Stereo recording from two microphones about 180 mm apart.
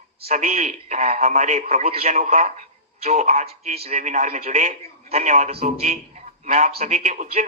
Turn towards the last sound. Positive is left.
turn(degrees=-40)  # may be behind; listen again after turning